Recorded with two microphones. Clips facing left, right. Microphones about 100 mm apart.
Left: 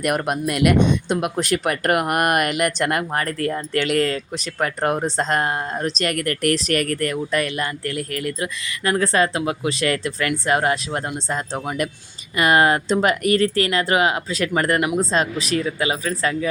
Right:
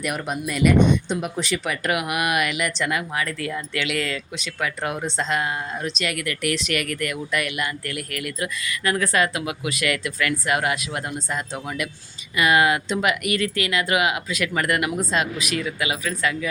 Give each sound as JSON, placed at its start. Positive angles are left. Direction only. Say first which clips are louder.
{"t": 0.0, "sound": "speech", "louder": "left 5 dB", "side_deg": 60}
{"t": 1.4, "sound": "speech", "louder": "left 5 dB", "side_deg": 50}